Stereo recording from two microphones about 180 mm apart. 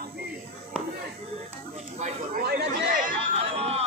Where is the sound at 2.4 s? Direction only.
60° right (ahead or behind).